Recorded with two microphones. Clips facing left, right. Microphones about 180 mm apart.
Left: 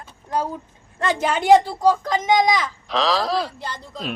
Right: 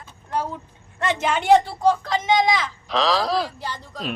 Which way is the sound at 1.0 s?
35° left (ahead or behind).